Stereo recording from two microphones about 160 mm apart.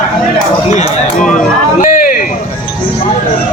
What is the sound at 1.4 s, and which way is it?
Speech, 55° left (ahead or behind).